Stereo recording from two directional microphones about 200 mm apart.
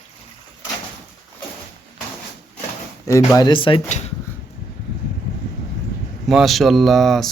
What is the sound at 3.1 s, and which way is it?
Speech, 15° left (ahead or behind).